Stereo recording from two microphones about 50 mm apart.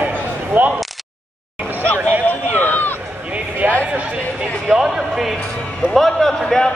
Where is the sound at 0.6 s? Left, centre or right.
Right.